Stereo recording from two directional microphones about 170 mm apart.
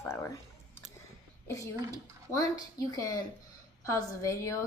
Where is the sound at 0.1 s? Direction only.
15° left (ahead or behind).